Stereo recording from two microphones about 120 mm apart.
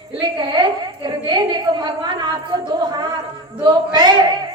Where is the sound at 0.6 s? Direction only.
40° right (ahead or behind).